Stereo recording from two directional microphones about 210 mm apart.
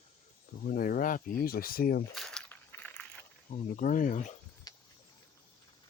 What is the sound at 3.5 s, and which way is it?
Speech, 35° left (ahead or behind).